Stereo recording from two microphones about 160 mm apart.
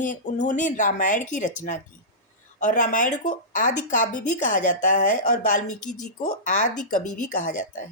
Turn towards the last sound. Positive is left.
turn(degrees=55)  # may be behind; listen again after turning